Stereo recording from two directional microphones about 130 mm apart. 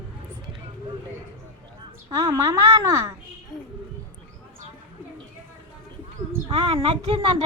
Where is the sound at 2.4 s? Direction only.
25° right (ahead or behind).